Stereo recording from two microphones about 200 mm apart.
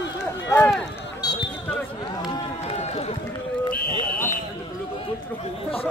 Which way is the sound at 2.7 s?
30° left (ahead or behind).